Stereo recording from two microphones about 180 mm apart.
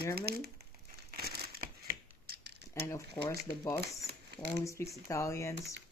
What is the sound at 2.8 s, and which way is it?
Speech, 15° left (ahead or behind).